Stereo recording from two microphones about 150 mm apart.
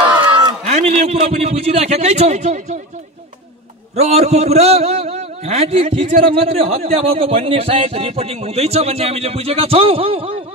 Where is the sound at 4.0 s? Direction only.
45° right (ahead or behind).